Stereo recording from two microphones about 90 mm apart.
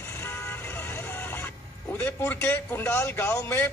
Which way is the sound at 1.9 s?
20° left (ahead or behind).